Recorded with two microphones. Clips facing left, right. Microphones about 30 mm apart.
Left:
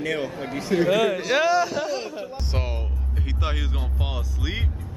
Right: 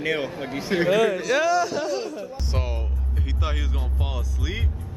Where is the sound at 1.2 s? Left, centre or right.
Left.